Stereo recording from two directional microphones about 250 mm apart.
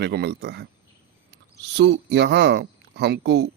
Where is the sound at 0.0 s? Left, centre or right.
Right.